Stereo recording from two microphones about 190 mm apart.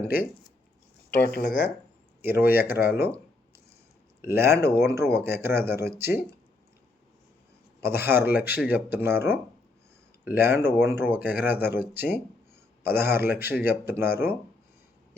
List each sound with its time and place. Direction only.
1.3 s speech: 50° left (ahead or behind)
2.2 s speech: 10° right (ahead or behind)
4.2 s speech: 15° right (ahead or behind)
7.8 s speech: 10° right (ahead or behind)